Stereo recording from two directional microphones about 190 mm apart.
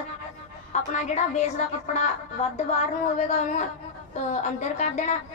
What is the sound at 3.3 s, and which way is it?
A woman's voice, 40° left (ahead or behind).